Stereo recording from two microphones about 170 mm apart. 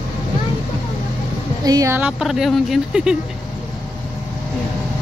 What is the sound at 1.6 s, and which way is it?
Speech, 20° right (ahead or behind).